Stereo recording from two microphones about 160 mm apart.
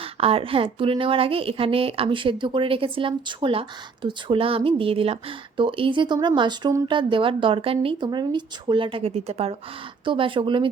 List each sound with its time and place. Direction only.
0.0 s speech: 35° right (ahead or behind)